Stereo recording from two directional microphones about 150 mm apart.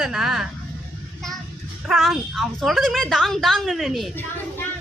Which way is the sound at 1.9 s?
Centre (ahead or behind).